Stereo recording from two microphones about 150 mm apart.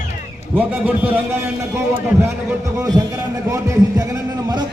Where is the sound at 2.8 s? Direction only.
25° right (ahead or behind).